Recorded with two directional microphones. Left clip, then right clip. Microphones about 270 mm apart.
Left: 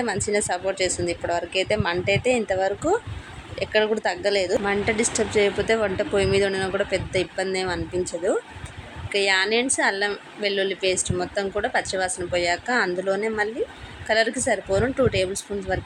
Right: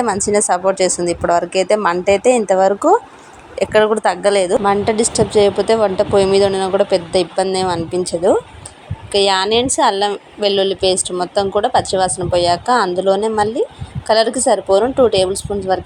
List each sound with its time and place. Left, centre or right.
0.0 s a woman's voice: centre